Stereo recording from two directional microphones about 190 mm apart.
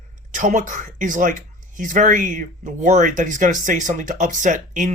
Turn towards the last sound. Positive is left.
turn(degrees=-40)  # may be behind; listen again after turning